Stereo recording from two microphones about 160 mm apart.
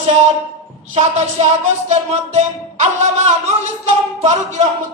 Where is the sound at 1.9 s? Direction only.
45° right (ahead or behind).